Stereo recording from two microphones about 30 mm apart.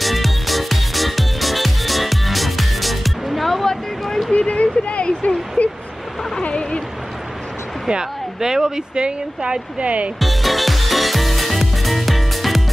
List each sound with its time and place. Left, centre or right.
0.0 s music: centre
4.3 s a sound: left
7.9 s speech: right
8.9 s speech: right
9.8 s speech: right
10.1 s music: centre